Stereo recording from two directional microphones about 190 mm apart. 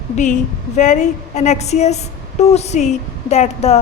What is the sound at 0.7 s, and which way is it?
A woman's voice, 40° left (ahead or behind).